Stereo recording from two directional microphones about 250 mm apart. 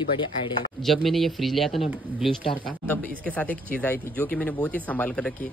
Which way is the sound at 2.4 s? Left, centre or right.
Left.